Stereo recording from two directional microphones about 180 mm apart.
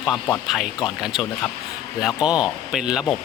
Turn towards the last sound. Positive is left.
turn(degrees=0)  # may be behind; listen again after turning